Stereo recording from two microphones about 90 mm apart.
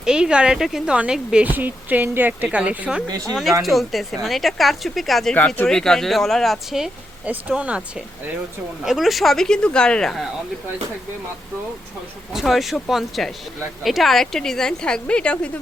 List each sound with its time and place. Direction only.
0.0 s speech: 10° right (ahead or behind)
1.5 s speech: 20° right (ahead or behind)
3.6 s speech: centre (ahead or behind)
7.3 s speech: 15° right (ahead or behind); by 10.2 s 5° left (ahead or behind)
12.3 s speech: centre (ahead or behind)